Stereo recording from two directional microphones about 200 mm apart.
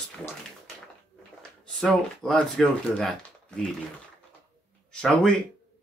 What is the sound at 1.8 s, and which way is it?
Speech, centre (ahead or behind).